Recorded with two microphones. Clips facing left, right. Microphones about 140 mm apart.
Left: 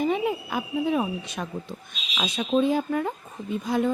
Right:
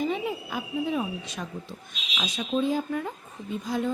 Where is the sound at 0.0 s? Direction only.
60° left (ahead or behind).